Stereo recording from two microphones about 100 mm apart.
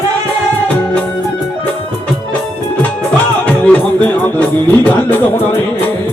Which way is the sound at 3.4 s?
15° left (ahead or behind).